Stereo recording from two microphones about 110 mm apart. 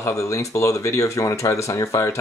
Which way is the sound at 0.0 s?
30° left (ahead or behind).